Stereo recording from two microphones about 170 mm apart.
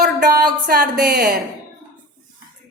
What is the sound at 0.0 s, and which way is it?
A woman's voice, 65° right (ahead or behind).